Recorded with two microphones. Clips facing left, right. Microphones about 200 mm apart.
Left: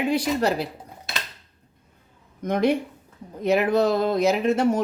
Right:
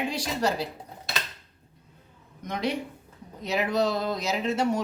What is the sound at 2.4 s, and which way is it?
A woman's voice, 50° left (ahead or behind).